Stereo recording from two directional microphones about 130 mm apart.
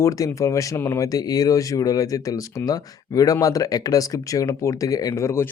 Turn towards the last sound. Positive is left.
turn(degrees=20)  # may be behind; listen again after turning